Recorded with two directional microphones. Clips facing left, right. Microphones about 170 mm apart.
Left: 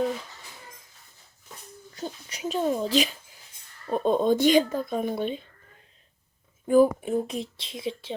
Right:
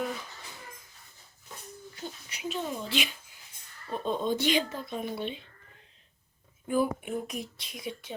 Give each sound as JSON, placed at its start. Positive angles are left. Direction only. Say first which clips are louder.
{"t": 2.0, "sound": "speech", "louder": "left 7 dB", "side_deg": 40}
{"t": 6.7, "sound": "speech", "louder": "left 9 dB", "side_deg": 40}
{"t": 7.2, "sound": "speech", "louder": "left 7 dB", "side_deg": 30}